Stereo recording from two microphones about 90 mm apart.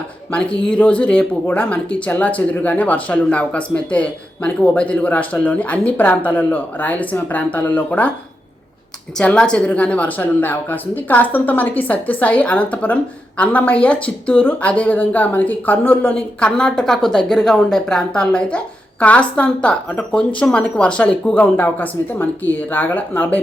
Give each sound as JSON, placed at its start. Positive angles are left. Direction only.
{"t": 0.3, "sound": "speech", "side_deg": 10}
{"t": 9.1, "sound": "speech", "side_deg": 10}